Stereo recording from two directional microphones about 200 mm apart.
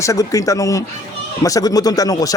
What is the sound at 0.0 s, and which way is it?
Speech, 15° left (ahead or behind).